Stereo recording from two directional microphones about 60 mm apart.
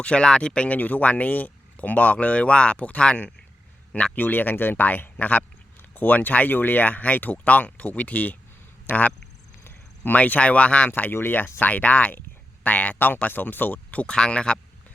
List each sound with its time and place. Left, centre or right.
0.0 s speech: centre
4.1 s speech: left
11.0 s speech: left
11.6 s speech: left